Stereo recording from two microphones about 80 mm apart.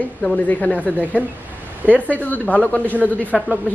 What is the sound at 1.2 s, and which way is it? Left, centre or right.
Speech, centre.